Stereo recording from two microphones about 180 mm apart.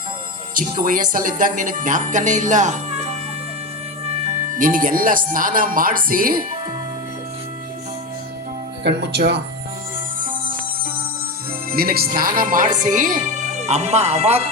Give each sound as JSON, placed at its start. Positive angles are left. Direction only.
{"t": 0.5, "sound": "speech", "side_deg": -50}
{"t": 8.8, "sound": "speech", "side_deg": -70}
{"t": 11.7, "sound": "speech", "side_deg": -55}